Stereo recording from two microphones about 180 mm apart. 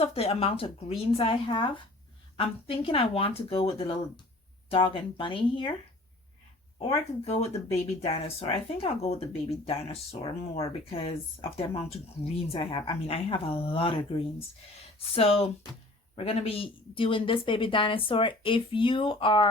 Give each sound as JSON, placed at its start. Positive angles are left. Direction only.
{"t": 0.0, "sound": "speech", "side_deg": 30}
{"t": 6.7, "sound": "speech", "side_deg": 35}